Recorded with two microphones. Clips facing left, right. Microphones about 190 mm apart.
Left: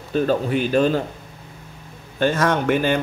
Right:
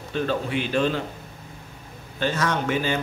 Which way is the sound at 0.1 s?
40° left (ahead or behind).